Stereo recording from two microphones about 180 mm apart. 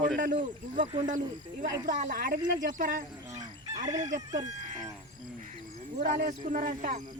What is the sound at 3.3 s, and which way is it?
Chicken, 20° right (ahead or behind).